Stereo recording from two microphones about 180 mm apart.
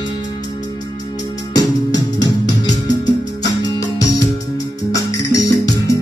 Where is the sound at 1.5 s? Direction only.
20° left (ahead or behind).